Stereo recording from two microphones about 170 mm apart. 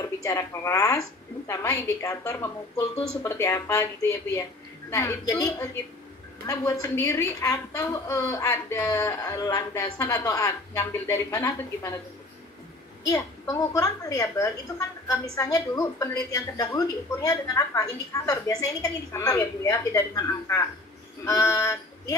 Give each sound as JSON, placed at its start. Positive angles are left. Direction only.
{"t": 0.2, "sound": "a woman's voice", "side_deg": 20}
{"t": 13.0, "sound": "a woman's voice", "side_deg": 20}